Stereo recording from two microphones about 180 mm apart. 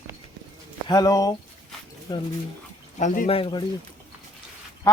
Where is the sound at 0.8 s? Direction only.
20° left (ahead or behind).